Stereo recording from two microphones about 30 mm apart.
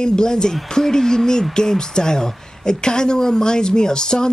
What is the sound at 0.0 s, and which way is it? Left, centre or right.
A woman's voice, left.